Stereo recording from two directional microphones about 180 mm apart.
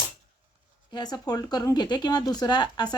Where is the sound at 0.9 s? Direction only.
25° left (ahead or behind).